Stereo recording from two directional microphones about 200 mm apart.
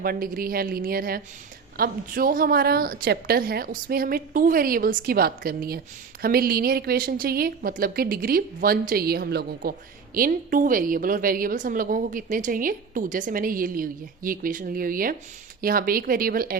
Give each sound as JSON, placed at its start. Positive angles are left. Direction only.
{"t": 0.0, "sound": "a woman's voice", "side_deg": -45}